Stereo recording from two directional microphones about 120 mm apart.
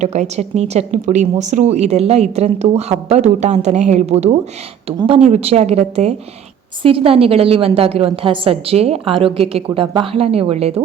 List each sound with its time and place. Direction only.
0.0 s a woman's voice: 70° right (ahead or behind)
6.8 s a woman's voice: 50° right (ahead or behind)